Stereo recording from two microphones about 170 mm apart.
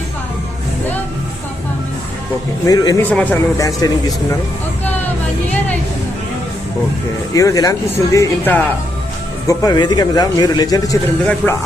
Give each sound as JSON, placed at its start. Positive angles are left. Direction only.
{"t": 2.6, "sound": "a man's voice", "side_deg": 20}
{"t": 3.0, "sound": "speech", "side_deg": 10}
{"t": 3.6, "sound": "a man's voice", "side_deg": 20}
{"t": 7.3, "sound": "a man's voice", "side_deg": 20}